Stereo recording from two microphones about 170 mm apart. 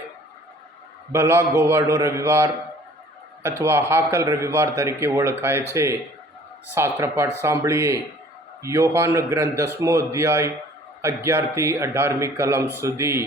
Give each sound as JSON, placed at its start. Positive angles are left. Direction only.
{"t": 1.1, "sound": "a man's voice", "side_deg": -15}